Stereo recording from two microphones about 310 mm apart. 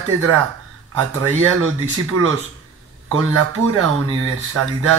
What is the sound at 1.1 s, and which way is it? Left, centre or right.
Speech, right.